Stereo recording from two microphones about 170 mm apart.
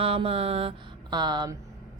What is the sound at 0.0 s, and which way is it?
Speech, 35° right (ahead or behind).